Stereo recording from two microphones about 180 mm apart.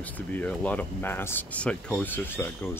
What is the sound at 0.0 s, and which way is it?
Speech, 10° left (ahead or behind).